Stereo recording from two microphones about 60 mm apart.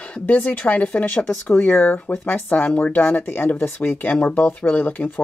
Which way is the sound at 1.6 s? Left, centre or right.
Left.